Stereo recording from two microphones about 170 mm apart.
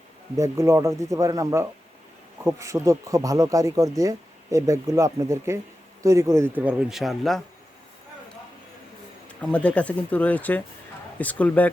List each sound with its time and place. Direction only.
0.3 s speech: 15° right (ahead or behind); by 7.4 s centre (ahead or behind)
9.5 s speech: 5° left (ahead or behind)